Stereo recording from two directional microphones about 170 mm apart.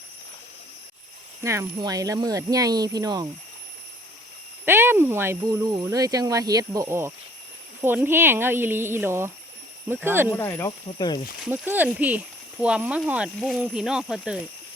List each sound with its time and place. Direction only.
1.4 s speech: 15° right (ahead or behind)
4.6 s speech: 10° right (ahead or behind)
10.3 s speech: 15° left (ahead or behind)
11.4 s speech: 10° right (ahead or behind)